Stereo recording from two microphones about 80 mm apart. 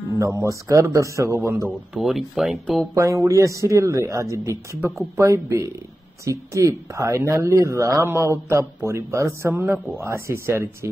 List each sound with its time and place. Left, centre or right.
0.2 s speech: right
2.0 s speech: centre
2.9 s speech: right